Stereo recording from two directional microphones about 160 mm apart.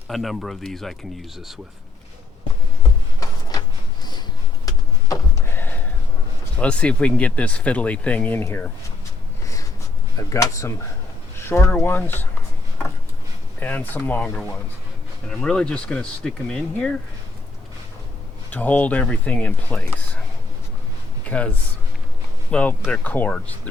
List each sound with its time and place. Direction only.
0.1 s speech: centre (ahead or behind)
4.6 s a sound: 20° left (ahead or behind)
6.6 s speech: 5° left (ahead or behind)
10.2 s speech: 20° left (ahead or behind)
13.6 s speech: 10° left (ahead or behind)
18.5 s speech: 10° left (ahead or behind)
21.2 s speech: 10° left (ahead or behind)
22.5 s speech: 5° left (ahead or behind)